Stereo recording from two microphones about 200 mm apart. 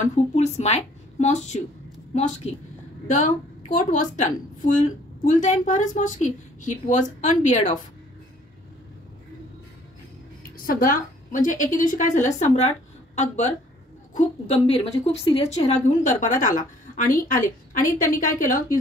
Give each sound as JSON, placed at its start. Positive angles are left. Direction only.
{"t": 0.1, "sound": "a woman's voice", "side_deg": 35}
{"t": 10.7, "sound": "a woman's voice", "side_deg": 45}
{"t": 14.1, "sound": "a woman's voice", "side_deg": 30}